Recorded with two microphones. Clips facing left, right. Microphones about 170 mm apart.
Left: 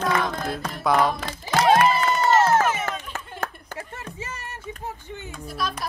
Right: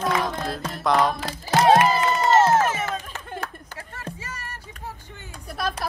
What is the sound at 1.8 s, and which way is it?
Crowd, 25° right (ahead or behind).